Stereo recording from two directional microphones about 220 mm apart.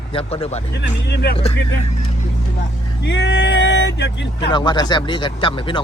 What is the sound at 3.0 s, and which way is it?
Speech, 50° left (ahead or behind).